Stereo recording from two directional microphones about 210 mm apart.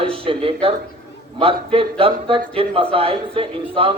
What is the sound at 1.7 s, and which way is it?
A man's voice, 25° right (ahead or behind).